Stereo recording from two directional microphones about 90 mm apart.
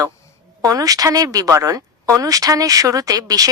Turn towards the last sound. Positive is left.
turn(degrees=-45)  # may be behind; listen again after turning